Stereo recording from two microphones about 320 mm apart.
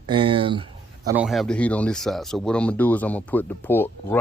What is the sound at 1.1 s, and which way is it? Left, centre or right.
Speech, centre.